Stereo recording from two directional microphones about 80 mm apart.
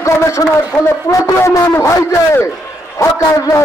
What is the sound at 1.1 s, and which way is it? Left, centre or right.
A man's voice, left.